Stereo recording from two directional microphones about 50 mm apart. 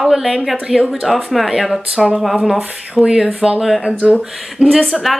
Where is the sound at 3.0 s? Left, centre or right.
Centre.